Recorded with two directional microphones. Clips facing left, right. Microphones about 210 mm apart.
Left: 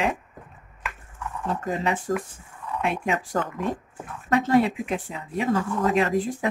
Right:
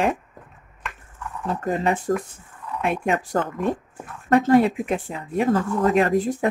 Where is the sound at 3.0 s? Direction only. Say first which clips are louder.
Right 3 dB; 50° right (ahead or behind).